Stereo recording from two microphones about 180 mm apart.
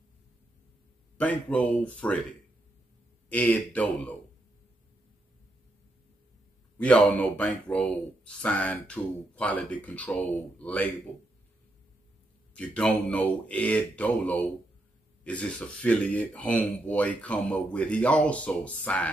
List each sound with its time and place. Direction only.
1.1 s speech: 5° left (ahead or behind)
3.3 s speech: 10° left (ahead or behind)
6.8 s speech: 5° left (ahead or behind)
12.5 s speech: 5° left (ahead or behind)